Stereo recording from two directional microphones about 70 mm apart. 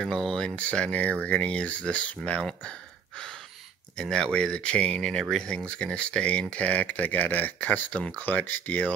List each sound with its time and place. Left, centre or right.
0.0 s speech: centre
3.9 s speech: centre